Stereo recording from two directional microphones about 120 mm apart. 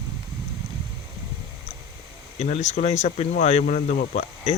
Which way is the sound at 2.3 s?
65° left (ahead or behind).